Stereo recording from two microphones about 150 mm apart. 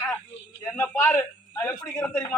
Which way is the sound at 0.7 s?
15° left (ahead or behind).